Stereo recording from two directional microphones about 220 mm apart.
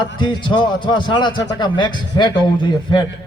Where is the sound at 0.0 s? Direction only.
20° left (ahead or behind).